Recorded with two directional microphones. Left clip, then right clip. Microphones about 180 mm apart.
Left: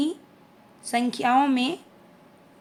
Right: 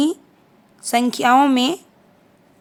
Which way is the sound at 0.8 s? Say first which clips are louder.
Right 7 dB; 50° right (ahead or behind).